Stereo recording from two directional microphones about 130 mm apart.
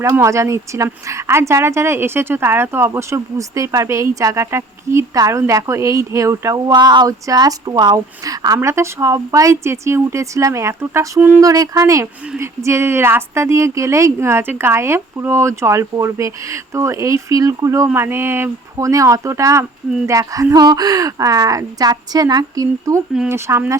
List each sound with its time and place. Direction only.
0.0 s speech: 20° right (ahead or behind)